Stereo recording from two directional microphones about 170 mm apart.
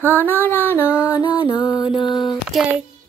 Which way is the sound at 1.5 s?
25° left (ahead or behind).